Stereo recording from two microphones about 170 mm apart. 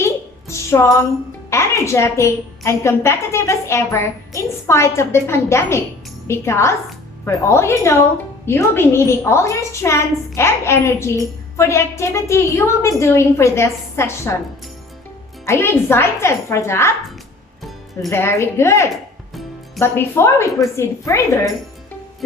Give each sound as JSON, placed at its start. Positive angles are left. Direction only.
{"t": 0.0, "sound": "music", "side_deg": 15}
{"t": 1.5, "sound": "a woman's voice", "side_deg": 15}
{"t": 15.4, "sound": "a woman's voice", "side_deg": 15}
{"t": 18.1, "sound": "a woman's voice", "side_deg": 15}
{"t": 19.3, "sound": "music", "side_deg": 0}
{"t": 19.8, "sound": "a woman's voice", "side_deg": 15}